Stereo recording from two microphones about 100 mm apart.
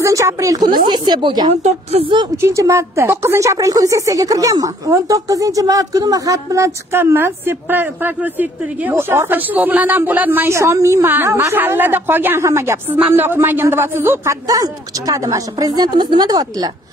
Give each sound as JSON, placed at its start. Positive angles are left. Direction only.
{"t": 0.0, "sound": "speech", "side_deg": -30}
{"t": 0.7, "sound": "speech", "side_deg": -50}
{"t": 1.5, "sound": "a woman's voice", "side_deg": -90}
{"t": 2.4, "sound": "a woman's voice", "side_deg": -30}
{"t": 14.5, "sound": "speech", "side_deg": -35}